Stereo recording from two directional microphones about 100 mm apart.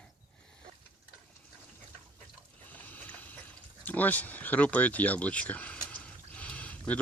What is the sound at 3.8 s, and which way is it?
Speech, 15° left (ahead or behind).